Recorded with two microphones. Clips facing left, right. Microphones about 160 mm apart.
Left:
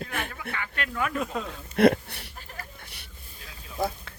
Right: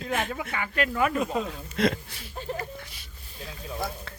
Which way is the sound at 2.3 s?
20° right (ahead or behind).